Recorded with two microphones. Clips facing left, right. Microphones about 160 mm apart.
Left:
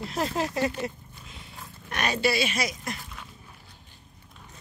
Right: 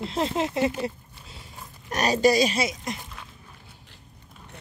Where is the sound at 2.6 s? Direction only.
25° right (ahead or behind).